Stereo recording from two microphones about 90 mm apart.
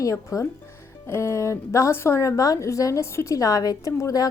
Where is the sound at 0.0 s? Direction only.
40° left (ahead or behind).